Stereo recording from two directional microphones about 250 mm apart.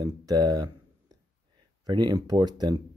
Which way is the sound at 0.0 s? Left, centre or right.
Centre.